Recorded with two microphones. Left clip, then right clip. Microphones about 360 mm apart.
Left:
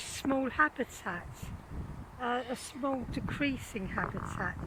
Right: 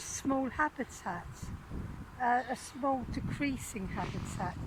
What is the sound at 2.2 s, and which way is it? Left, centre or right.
Speech, centre.